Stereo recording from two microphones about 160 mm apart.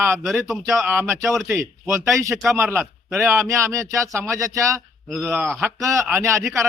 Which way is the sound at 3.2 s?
15° right (ahead or behind).